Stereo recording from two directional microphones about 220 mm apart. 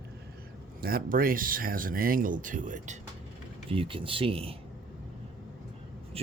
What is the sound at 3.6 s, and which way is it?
Speech, 25° right (ahead or behind).